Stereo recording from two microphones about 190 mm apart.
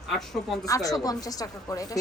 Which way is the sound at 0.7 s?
20° left (ahead or behind).